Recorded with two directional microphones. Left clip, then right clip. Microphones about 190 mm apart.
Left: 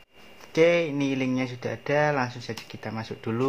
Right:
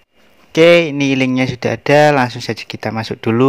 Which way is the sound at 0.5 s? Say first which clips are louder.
Right 12 dB; 40° right (ahead or behind).